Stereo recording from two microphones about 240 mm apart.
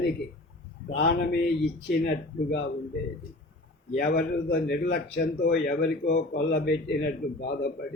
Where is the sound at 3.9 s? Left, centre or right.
Left.